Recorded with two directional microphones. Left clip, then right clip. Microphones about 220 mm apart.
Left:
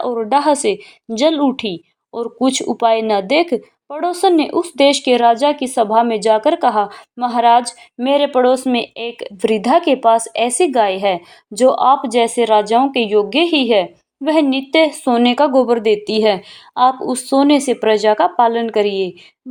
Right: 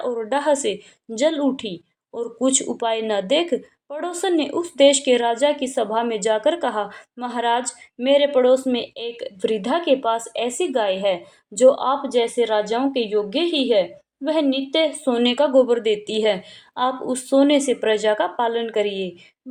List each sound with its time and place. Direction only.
0.0 s a woman's voice: 30° left (ahead or behind)